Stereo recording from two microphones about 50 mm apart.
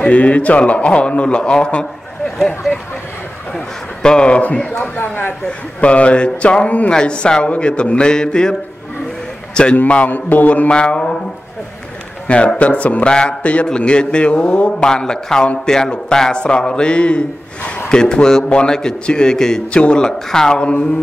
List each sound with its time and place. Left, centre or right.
0.0 s a man's voice: left; by 2.8 s centre
3.5 s a sound: centre
4.6 s a man's voice: left
4.9 s a man's voice: left
5.8 s a man's voice: left
10.7 s a man's voice: left
12.5 s a man's voice: left
14.9 s a man's voice: centre